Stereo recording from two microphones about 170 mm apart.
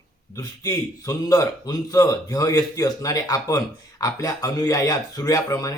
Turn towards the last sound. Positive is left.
turn(degrees=20)  # may be behind; listen again after turning